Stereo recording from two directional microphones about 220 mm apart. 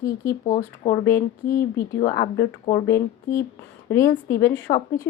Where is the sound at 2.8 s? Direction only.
15° left (ahead or behind).